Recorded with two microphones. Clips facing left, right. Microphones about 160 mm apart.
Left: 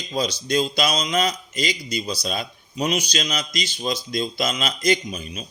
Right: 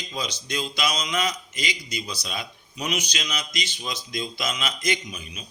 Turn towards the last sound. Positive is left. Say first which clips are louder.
# left 7 dB
turn(degrees=35)  # may be behind; listen again after turning